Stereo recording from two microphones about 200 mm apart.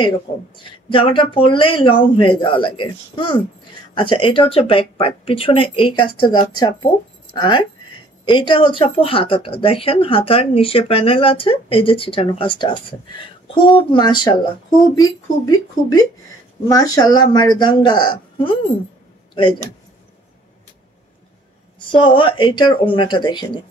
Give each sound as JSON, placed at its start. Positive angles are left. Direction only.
{"t": 0.3, "sound": "speech", "side_deg": 35}
{"t": 0.8, "sound": "speech", "side_deg": 25}
{"t": 13.7, "sound": "speech", "side_deg": 20}
{"t": 21.9, "sound": "speech", "side_deg": 25}